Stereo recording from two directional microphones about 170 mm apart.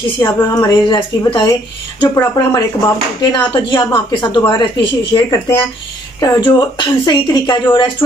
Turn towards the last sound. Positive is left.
turn(degrees=25)  # may be behind; listen again after turning